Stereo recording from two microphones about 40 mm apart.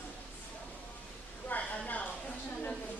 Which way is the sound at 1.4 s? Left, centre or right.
Left.